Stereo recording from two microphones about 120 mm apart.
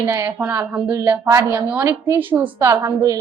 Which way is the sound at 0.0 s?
25° right (ahead or behind).